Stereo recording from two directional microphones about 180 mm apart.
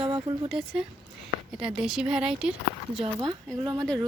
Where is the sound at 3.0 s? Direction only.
30° right (ahead or behind).